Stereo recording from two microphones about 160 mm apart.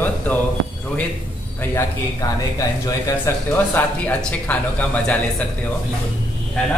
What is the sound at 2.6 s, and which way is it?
A man's voice, 20° left (ahead or behind).